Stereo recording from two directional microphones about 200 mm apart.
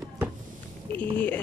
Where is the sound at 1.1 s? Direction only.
10° left (ahead or behind).